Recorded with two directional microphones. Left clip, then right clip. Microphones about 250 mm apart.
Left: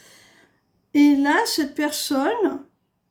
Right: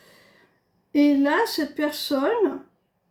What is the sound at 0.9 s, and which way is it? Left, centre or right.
A woman's voice, left.